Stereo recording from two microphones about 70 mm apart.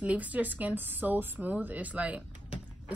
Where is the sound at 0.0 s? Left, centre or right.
Right.